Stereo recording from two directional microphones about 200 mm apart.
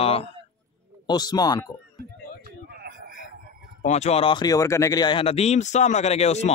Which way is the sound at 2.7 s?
50° right (ahead or behind).